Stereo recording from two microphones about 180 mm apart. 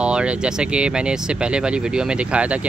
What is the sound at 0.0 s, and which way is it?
Speech, 5° right (ahead or behind).